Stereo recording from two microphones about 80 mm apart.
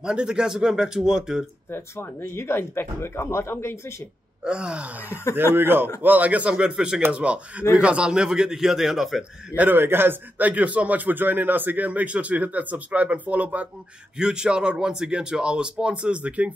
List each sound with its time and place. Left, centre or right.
0.0 s speech: centre
1.7 s speech: left
4.5 s speech: centre
5.3 s a man's voice: right; by 9.2 s centre
9.6 s a man's voice: right